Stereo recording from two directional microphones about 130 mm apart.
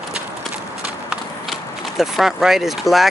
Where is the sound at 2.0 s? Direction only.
5° right (ahead or behind).